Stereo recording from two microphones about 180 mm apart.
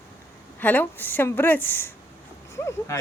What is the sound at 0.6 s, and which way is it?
Speech, 10° left (ahead or behind).